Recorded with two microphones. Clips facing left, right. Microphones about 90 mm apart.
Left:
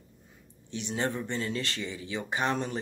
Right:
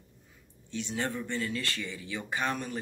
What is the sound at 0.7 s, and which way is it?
Speech, 20° left (ahead or behind).